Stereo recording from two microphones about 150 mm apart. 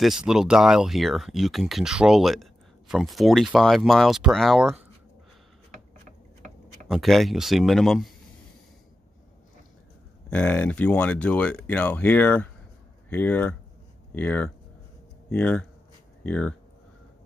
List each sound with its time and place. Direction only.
0.0 s speech: 5° right (ahead or behind)
6.0 s tick-tock: 60° right (ahead or behind)
6.9 s speech: centre (ahead or behind)
10.3 s speech: 10° left (ahead or behind)